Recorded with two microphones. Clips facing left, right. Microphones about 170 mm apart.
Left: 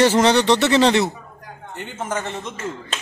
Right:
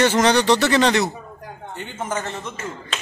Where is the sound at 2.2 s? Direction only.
20° left (ahead or behind).